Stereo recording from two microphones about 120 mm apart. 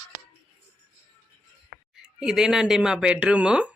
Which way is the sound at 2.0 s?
5° right (ahead or behind).